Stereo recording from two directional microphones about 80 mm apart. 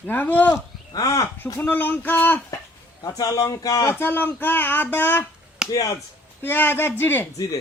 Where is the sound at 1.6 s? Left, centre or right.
Left.